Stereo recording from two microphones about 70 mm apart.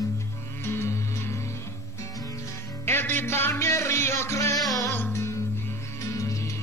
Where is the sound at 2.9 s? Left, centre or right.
Left.